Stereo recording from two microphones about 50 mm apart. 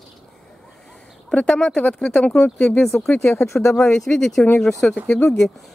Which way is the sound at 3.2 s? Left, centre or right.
Left.